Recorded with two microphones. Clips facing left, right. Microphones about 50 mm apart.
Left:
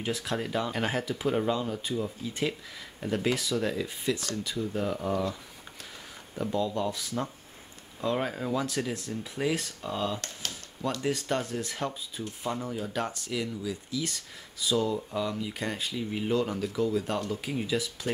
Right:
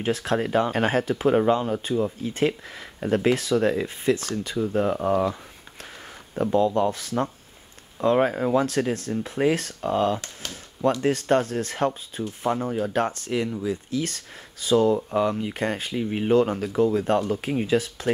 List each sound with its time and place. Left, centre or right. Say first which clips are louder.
0.0 s speech: right 7 dB; right
6.3 s speech: right 8 dB; right